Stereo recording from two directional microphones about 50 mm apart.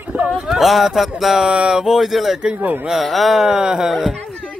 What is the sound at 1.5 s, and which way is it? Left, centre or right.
Speech, right.